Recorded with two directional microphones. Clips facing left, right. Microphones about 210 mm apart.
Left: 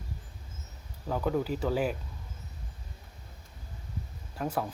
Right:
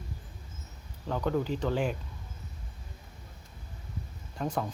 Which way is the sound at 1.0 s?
5° left (ahead or behind).